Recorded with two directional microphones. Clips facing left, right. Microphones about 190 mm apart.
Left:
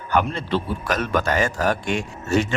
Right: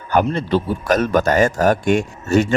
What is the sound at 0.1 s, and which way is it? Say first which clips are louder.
A man's voice: right 5 dB; 40° right (ahead or behind).